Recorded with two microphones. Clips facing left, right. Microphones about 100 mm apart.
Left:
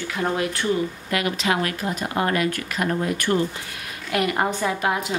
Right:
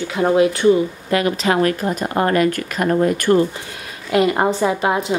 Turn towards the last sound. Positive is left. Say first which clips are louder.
# right 5 dB
turn(degrees=-25)  # may be behind; listen again after turning